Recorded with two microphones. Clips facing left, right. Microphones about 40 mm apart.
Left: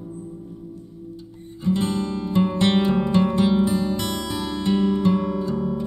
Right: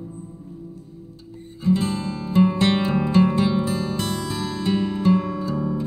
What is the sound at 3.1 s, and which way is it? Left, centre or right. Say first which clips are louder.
Music: right 2 dB; right.